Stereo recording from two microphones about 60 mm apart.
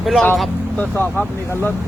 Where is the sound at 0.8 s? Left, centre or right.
Left.